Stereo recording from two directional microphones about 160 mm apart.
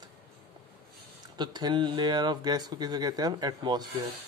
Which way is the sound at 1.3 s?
25° right (ahead or behind).